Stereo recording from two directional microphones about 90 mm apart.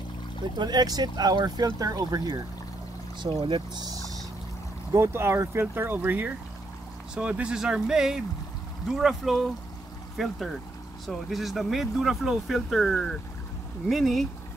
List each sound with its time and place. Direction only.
0.6 s speech: 50° right (ahead or behind)
3.4 s speech: 60° right (ahead or behind)
4.9 s speech: 30° right (ahead or behind); by 14.2 s centre (ahead or behind)